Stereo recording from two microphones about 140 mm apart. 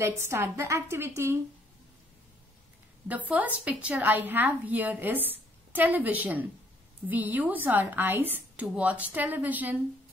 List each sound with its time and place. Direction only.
0.0 s a woman's voice: 15° right (ahead or behind)
3.1 s a woman's voice: 10° right (ahead or behind)